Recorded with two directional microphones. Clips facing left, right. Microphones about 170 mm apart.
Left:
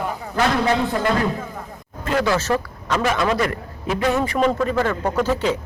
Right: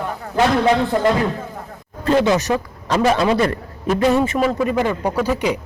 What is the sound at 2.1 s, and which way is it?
Speech, 20° right (ahead or behind).